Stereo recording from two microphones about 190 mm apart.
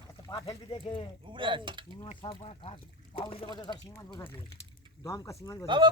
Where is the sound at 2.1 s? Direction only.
30° left (ahead or behind).